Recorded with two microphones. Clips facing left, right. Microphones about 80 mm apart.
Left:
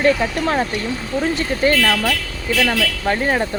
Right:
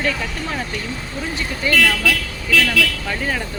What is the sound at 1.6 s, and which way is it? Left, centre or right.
Speech, left.